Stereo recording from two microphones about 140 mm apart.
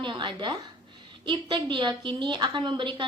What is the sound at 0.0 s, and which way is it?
A woman's voice, 35° right (ahead or behind).